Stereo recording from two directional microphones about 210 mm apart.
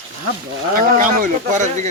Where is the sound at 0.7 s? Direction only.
40° right (ahead or behind).